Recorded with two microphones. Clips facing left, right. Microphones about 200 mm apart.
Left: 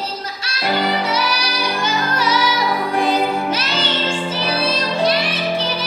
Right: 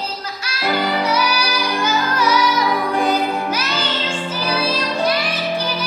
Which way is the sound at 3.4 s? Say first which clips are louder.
Left 1 dB; 25° left (ahead or behind).